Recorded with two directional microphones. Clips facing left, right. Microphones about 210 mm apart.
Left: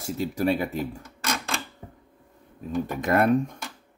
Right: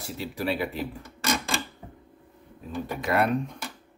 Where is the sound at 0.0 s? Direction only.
45° left (ahead or behind).